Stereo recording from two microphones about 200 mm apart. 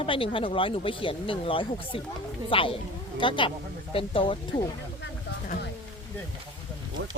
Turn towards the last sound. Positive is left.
turn(degrees=-65)  # may be behind; listen again after turning